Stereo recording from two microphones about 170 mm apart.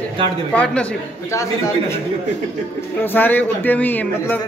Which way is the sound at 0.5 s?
5° left (ahead or behind).